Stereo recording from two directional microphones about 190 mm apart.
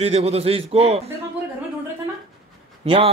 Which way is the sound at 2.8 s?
30° right (ahead or behind).